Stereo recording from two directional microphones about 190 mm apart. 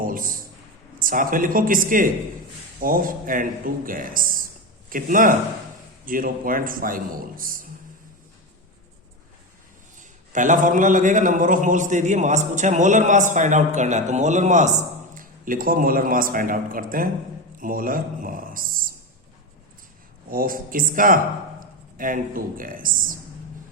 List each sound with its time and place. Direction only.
0.0 s a sound: 45° right (ahead or behind)
0.9 s a man's voice: 45° right (ahead or behind)
10.0 s a man's voice: 40° right (ahead or behind)
20.3 s a man's voice: 50° right (ahead or behind)